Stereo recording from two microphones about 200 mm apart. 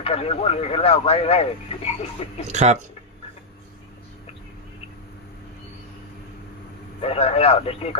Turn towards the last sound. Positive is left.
turn(degrees=30)  # may be behind; listen again after turning